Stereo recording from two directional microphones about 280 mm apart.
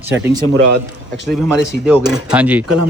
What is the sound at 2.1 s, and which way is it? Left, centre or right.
Speech, centre.